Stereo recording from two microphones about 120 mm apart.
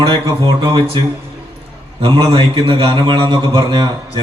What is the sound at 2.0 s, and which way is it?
A man's voice, 45° right (ahead or behind).